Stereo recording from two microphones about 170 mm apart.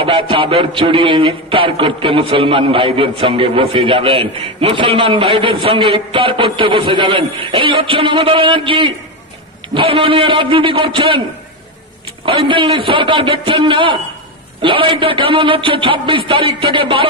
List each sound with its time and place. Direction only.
0.0 s a man's voice: 30° right (ahead or behind)
12.3 s a man's voice: 30° right (ahead or behind)